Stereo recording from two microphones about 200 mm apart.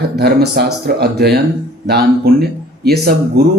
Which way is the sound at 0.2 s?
50° right (ahead or behind).